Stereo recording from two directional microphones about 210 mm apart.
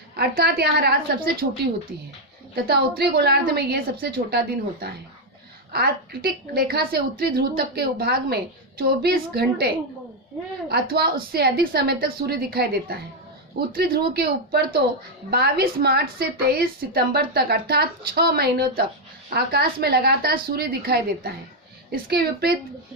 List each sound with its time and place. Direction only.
0.2 s a woman's voice: 50° right (ahead or behind)
2.6 s a woman's voice: 50° right (ahead or behind)
10.7 s a woman's voice: 50° right (ahead or behind)